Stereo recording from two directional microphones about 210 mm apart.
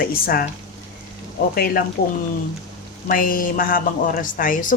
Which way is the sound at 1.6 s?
45° left (ahead or behind).